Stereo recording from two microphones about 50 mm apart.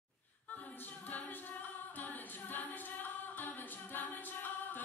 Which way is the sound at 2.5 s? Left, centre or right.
Left.